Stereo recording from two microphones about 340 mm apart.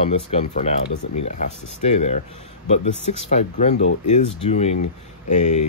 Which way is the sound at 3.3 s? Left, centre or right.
Centre.